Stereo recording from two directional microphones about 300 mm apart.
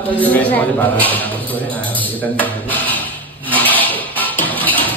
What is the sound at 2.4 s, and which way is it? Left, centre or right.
Speech, centre.